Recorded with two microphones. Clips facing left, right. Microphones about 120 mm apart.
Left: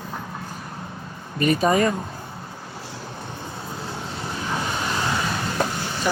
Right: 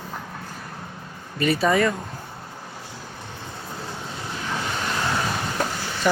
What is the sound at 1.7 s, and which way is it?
Speech, 35° left (ahead or behind).